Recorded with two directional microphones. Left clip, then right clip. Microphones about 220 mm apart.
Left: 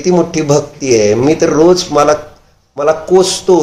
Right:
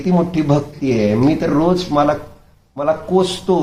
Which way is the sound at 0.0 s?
40° left (ahead or behind).